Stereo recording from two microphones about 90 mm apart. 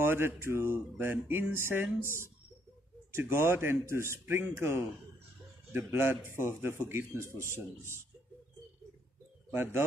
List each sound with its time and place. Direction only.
0.0 s music: 25° right (ahead or behind)
9.5 s music: 25° right (ahead or behind)